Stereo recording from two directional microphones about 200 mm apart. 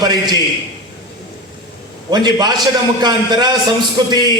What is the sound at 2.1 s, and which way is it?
A man's voice, 20° right (ahead or behind).